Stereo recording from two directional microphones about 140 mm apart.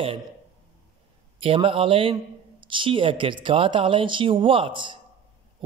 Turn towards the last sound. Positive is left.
turn(degrees=-35)  # may be behind; listen again after turning